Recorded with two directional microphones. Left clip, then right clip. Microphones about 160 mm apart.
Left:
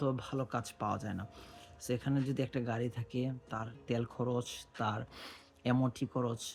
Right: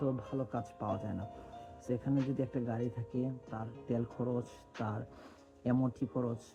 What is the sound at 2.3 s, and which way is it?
Speech, 20° left (ahead or behind).